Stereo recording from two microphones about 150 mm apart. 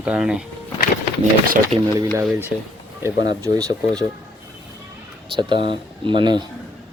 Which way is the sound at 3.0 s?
25° right (ahead or behind).